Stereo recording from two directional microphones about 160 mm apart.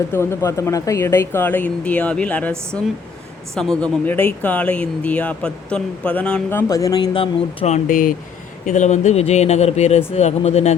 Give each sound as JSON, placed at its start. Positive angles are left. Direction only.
{"t": 0.1, "sound": "speech", "side_deg": 15}
{"t": 7.7, "sound": "speech", "side_deg": 55}